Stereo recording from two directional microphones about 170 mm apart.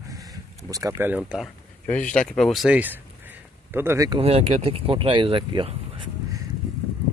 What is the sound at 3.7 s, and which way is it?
Speech, 15° right (ahead or behind).